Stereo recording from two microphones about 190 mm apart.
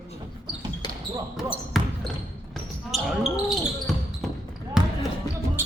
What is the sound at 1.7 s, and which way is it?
Speech, centre (ahead or behind).